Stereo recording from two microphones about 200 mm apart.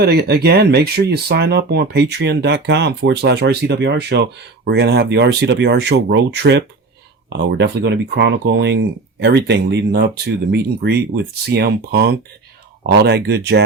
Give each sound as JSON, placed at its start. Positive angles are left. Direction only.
{"t": 0.0, "sound": "speech", "side_deg": -55}